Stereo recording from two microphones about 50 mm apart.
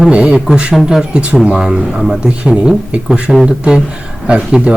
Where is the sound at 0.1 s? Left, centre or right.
Centre.